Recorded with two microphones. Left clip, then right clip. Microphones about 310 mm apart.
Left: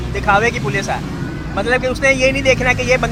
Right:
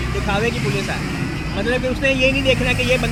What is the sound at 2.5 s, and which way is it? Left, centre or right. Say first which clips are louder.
Speech: left 3 dB; left.